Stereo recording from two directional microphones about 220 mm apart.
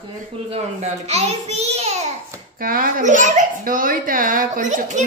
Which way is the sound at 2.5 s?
40° right (ahead or behind).